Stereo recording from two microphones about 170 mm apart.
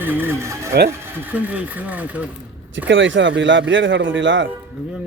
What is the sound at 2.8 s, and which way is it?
Speech, 90° right.